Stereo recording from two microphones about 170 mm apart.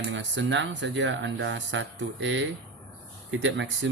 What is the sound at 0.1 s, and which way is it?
Speech, 90° right.